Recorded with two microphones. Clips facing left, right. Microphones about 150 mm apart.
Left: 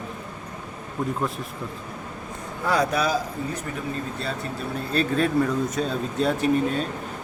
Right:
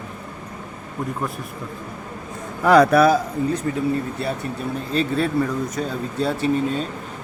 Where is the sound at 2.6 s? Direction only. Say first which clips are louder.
Right 9 dB; 70° right (ahead or behind).